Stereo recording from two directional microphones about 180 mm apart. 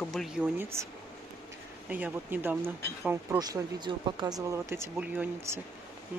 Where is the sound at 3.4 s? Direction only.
25° right (ahead or behind).